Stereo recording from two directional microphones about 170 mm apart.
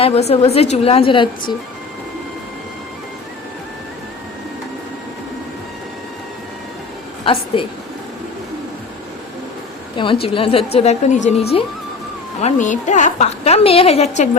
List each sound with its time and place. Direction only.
0.0 s a woman's voice: 40° left (ahead or behind)
10.0 s a woman's voice: 30° left (ahead or behind)
12.4 s a woman's voice: 45° left (ahead or behind)